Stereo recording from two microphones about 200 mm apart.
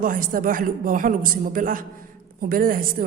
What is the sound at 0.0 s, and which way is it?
A woman's voice, 45° right (ahead or behind).